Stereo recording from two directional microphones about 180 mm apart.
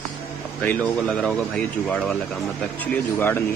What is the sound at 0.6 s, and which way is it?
Speech, 5° left (ahead or behind).